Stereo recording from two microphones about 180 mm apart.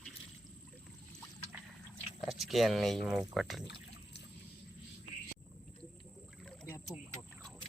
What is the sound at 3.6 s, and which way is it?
Pour, 75° left (ahead or behind).